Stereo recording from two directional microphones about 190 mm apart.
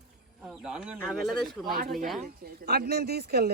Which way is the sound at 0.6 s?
5° right (ahead or behind).